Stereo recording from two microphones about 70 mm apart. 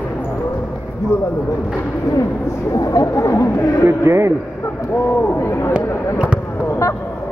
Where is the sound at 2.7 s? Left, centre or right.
Left.